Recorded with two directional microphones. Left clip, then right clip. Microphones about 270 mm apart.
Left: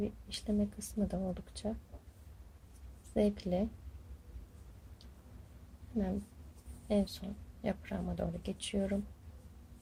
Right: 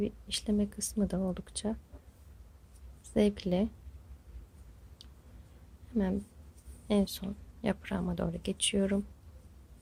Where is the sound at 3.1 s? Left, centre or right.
Right.